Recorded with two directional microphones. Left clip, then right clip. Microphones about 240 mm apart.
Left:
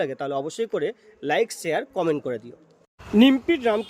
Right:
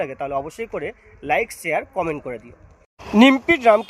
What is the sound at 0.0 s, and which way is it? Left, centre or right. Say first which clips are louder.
Speech: right 2 dB; centre.